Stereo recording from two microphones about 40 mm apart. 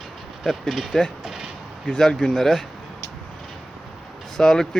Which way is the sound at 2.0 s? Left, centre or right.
Centre.